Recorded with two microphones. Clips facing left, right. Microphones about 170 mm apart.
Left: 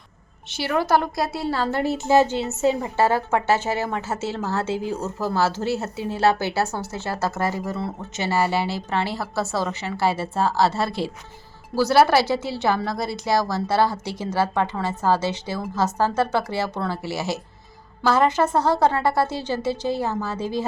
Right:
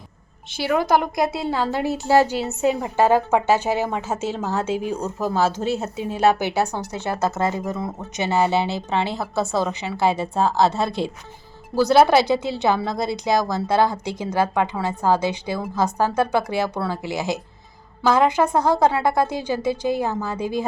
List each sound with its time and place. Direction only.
0.5 s a woman's voice: 10° right (ahead or behind)